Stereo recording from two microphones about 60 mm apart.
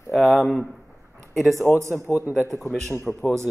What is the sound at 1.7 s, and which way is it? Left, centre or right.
Speech, left.